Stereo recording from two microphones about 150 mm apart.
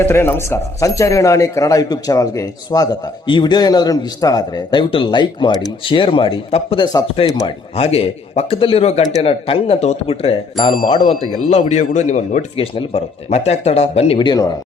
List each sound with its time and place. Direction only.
0.0 s speech: 15° left (ahead or behind); by 6.8 s 35° left (ahead or behind)
7.3 s speech: 25° left (ahead or behind)
7.8 s speech: 45° left (ahead or behind)
12.5 s speech: 35° left (ahead or behind)
14.2 s speech: 25° left (ahead or behind)